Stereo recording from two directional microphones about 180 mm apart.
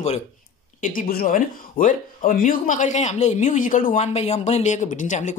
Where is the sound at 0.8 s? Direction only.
50° left (ahead or behind).